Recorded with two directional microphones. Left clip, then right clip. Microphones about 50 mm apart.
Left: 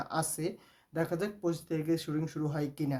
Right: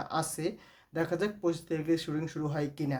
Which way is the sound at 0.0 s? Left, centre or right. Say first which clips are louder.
Right 1 dB; left.